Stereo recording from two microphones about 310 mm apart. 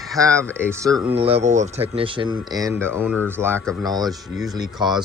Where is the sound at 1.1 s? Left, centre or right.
Centre.